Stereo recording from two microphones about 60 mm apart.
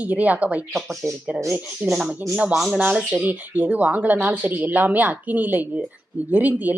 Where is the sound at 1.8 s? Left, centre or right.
Centre.